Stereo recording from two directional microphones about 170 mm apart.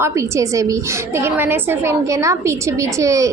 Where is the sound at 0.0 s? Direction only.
20° right (ahead or behind).